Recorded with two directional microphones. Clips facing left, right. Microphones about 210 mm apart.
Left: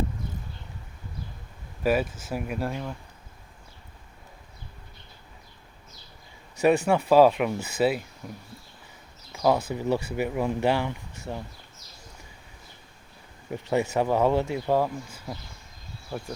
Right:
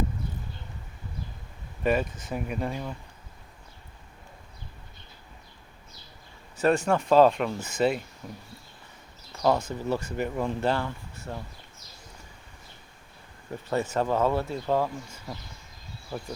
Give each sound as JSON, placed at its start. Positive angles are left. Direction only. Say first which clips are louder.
{"t": 1.8, "sound": "speech", "louder": "left 1 dB", "side_deg": 5}
{"t": 6.6, "sound": "speech", "louder": "left 2 dB", "side_deg": 10}
{"t": 13.5, "sound": "speech", "louder": "left 3 dB", "side_deg": 10}